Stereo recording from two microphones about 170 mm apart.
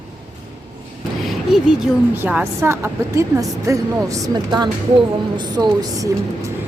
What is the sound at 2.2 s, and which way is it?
A woman's voice, 10° right (ahead or behind).